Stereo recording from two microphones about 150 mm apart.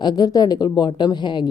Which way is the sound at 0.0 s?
30° left (ahead or behind).